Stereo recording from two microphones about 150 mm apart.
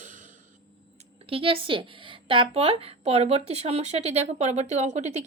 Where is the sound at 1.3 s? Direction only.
40° right (ahead or behind).